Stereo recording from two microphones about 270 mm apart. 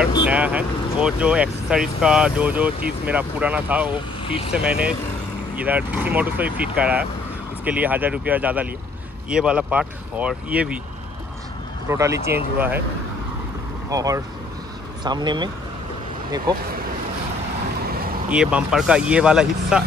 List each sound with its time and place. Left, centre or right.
0.3 s speech: centre
11.9 s speech: centre
13.8 s speech: centre
18.3 s speech: centre